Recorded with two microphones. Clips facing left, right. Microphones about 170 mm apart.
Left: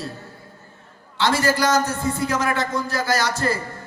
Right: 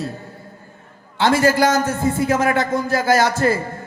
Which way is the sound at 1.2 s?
50° right (ahead or behind).